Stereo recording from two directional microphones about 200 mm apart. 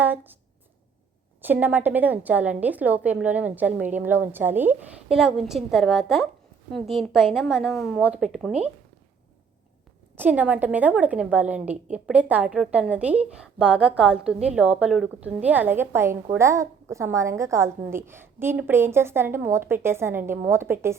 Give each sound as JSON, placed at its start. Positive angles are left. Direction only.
{"t": 0.0, "sound": "speech", "side_deg": -10}
{"t": 1.4, "sound": "a woman's voice", "side_deg": -10}
{"t": 10.2, "sound": "a woman's voice", "side_deg": -10}